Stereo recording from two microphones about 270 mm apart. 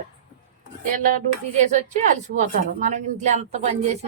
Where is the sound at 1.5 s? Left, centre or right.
Right.